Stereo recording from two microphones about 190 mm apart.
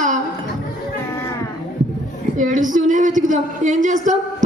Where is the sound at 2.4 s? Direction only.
45° right (ahead or behind).